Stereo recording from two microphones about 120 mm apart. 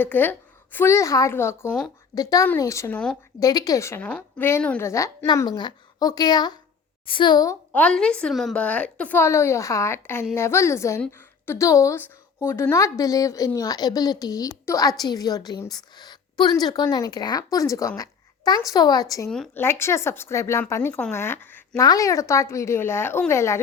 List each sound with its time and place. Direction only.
0.0 s a woman's voice: 15° left (ahead or behind); by 7.5 s 35° left (ahead or behind)
7.7 s a woman's voice: 10° left (ahead or behind)
8.5 s a woman's voice: 10° left (ahead or behind)
21.8 s a woman's voice: 30° left (ahead or behind)